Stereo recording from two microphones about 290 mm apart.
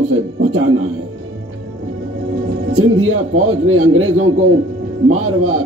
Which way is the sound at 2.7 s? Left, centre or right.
Right.